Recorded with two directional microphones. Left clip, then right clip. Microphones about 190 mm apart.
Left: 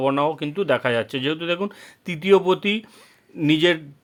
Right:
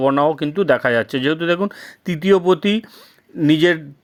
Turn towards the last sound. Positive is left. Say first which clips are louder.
# right 4 dB
turn(degrees=-25)  # may be behind; listen again after turning